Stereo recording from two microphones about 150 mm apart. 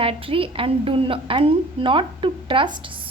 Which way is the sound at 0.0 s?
35° right (ahead or behind).